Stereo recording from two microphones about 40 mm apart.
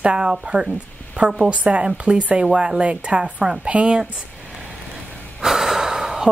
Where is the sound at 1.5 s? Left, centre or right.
Right.